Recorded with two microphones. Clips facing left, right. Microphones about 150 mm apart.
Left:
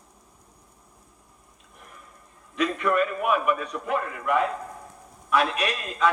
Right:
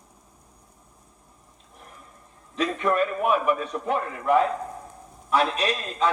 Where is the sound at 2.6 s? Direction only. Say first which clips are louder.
Even; 30° right (ahead or behind).